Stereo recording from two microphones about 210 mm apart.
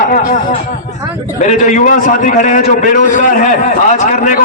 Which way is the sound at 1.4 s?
35° left (ahead or behind).